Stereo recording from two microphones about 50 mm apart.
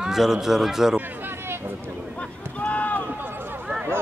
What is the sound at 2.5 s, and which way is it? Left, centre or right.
Speech, left.